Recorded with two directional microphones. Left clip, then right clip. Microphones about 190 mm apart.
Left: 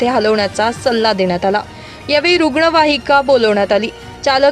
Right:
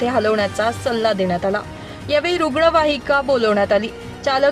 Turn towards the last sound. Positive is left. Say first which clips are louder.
# left 5 dB
turn(degrees=10)  # may be behind; listen again after turning